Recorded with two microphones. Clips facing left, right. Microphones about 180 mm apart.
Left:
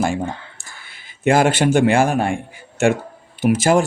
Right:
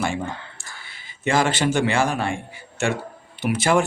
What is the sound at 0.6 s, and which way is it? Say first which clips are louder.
A man's voice: even; 50° left (ahead or behind).